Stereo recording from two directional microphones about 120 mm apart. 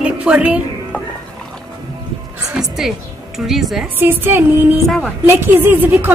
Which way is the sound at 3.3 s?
Centre (ahead or behind).